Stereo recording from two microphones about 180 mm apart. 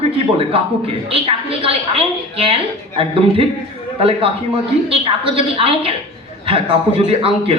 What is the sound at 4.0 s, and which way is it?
Speech, 30° right (ahead or behind).